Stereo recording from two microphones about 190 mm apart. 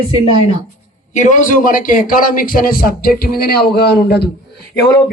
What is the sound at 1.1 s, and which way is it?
A man's voice, 40° left (ahead or behind).